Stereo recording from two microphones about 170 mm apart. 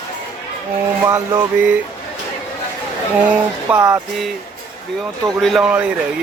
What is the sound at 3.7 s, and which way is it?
Music, 5° right (ahead or behind).